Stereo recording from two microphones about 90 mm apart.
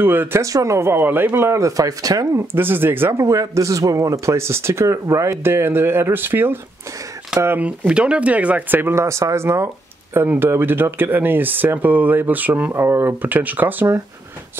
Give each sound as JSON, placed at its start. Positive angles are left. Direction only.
{"t": 0.0, "sound": "speech", "side_deg": -25}
{"t": 0.5, "sound": "speech", "side_deg": -35}
{"t": 2.5, "sound": "speech", "side_deg": -25}
{"t": 7.5, "sound": "speech", "side_deg": -15}